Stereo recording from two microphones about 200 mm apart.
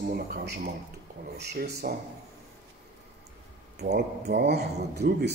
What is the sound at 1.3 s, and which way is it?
Speech, 55° right (ahead or behind).